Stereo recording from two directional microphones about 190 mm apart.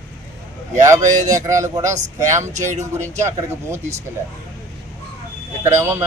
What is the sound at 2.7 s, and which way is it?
Speech, 40° right (ahead or behind).